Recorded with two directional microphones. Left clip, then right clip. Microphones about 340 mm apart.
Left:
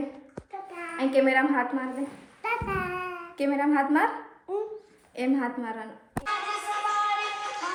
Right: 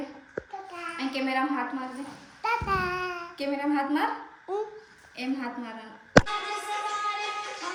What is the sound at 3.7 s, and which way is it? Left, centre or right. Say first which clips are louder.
Speech: left 3 dB; left.